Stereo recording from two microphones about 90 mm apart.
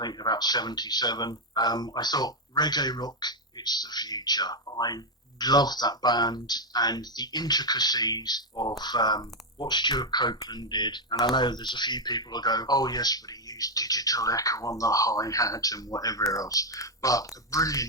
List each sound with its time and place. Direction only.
0.0 s speech: 50° left (ahead or behind)